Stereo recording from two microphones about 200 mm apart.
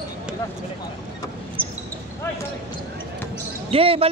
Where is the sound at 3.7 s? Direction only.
30° right (ahead or behind).